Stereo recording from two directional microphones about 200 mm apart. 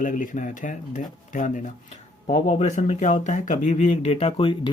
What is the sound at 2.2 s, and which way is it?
Speech, 35° left (ahead or behind).